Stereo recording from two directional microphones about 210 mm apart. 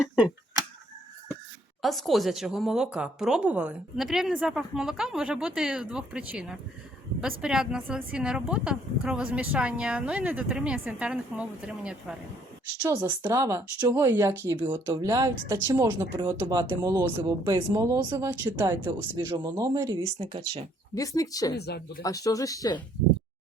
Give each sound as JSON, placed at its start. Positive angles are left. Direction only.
{"t": 1.8, "sound": "a woman's voice", "side_deg": 0}
{"t": 20.9, "sound": "speech", "side_deg": 15}
{"t": 21.5, "sound": "speech", "side_deg": 50}
{"t": 22.0, "sound": "speech", "side_deg": 15}